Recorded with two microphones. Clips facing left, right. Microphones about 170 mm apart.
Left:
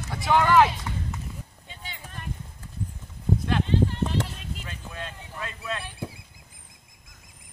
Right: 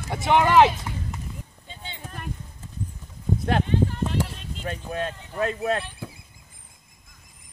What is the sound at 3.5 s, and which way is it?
Clip-clop, 55° right (ahead or behind).